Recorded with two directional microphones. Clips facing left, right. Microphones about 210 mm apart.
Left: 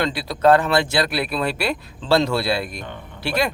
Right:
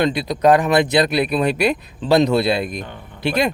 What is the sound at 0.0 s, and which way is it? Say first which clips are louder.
Speech: right 2 dB; 20° right (ahead or behind).